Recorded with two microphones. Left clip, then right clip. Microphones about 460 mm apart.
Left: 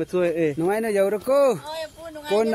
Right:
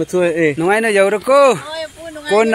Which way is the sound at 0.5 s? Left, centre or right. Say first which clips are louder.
Right 9 dB; left.